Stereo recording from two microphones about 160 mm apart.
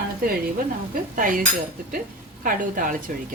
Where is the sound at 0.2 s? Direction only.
65° right (ahead or behind).